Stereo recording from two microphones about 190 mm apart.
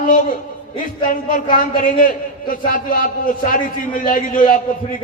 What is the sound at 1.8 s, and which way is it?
A man's voice, 45° left (ahead or behind).